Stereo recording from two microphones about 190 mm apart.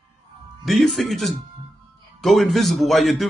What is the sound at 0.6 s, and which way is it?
Speech, centre (ahead or behind).